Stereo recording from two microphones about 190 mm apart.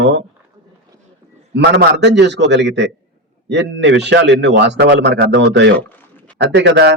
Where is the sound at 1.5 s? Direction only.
65° right (ahead or behind).